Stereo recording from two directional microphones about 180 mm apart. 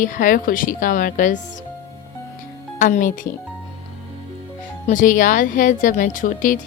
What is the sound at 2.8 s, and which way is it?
Speech, 45° left (ahead or behind).